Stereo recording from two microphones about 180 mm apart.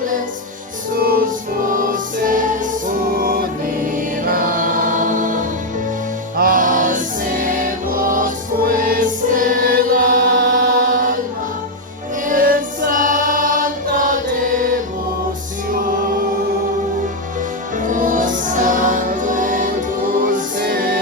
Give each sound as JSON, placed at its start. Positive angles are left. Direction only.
{"t": 0.9, "sound": "music", "side_deg": -55}
{"t": 3.9, "sound": "choir", "side_deg": -50}
{"t": 6.3, "sound": "music", "side_deg": -50}
{"t": 12.2, "sound": "choir", "side_deg": -50}
{"t": 15.7, "sound": "music", "side_deg": -50}
{"t": 17.7, "sound": "music", "side_deg": -45}